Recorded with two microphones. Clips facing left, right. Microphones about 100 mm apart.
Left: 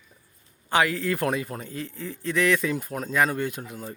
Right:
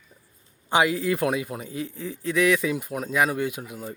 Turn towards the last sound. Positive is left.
turn(degrees=-5)  # may be behind; listen again after turning